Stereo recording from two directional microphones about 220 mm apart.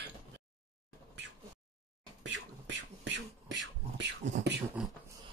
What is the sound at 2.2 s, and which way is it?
Beatboxing, 55° right (ahead or behind).